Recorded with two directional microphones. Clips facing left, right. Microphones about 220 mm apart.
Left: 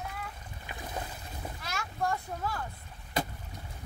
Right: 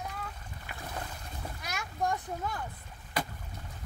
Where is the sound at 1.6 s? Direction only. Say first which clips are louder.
Even; 15° right (ahead or behind).